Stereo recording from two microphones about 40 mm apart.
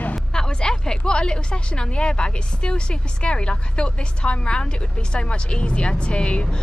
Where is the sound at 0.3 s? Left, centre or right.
Left.